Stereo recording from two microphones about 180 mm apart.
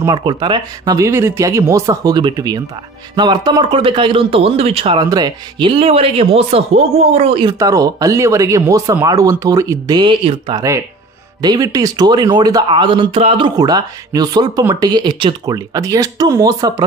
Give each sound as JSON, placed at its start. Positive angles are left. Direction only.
{"t": 0.0, "sound": "speech", "side_deg": -25}
{"t": 7.5, "sound": "speech", "side_deg": -20}
{"t": 13.2, "sound": "speech", "side_deg": -35}
{"t": 13.6, "sound": "speech", "side_deg": -20}